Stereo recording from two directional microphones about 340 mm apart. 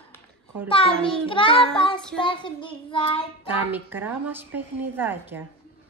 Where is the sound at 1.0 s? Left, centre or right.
Centre.